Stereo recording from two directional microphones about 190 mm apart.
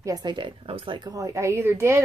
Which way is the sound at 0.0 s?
20° right (ahead or behind).